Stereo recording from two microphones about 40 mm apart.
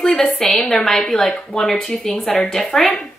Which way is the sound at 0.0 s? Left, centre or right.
Centre.